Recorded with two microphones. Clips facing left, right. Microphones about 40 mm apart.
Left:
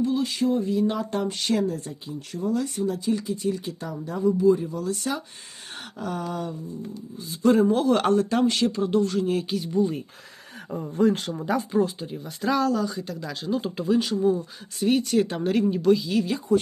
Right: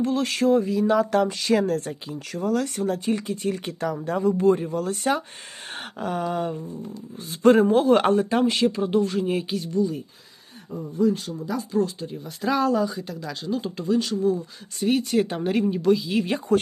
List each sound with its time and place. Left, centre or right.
0.0 s speech: right
4.2 s speech: right
5.6 s a sound: right
7.3 s speech: right; by 9.4 s centre
9.8 s speech: left
10.7 s speech: left
11.8 s speech: centre
12.6 s speech: centre
12.9 s speech: centre
16.5 s speech: right